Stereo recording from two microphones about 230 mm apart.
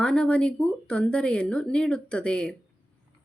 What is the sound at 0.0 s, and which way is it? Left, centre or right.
A woman's voice, centre.